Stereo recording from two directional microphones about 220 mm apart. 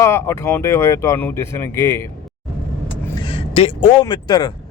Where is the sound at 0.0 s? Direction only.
10° left (ahead or behind).